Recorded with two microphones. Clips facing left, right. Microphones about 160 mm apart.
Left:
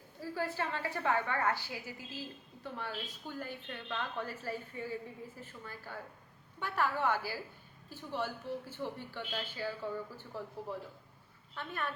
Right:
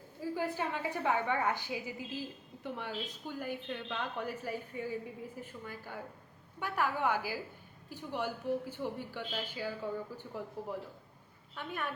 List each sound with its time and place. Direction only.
0.2 s a woman's voice: 15° right (ahead or behind)